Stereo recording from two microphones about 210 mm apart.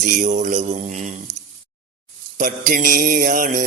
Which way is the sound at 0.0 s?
35° right (ahead or behind).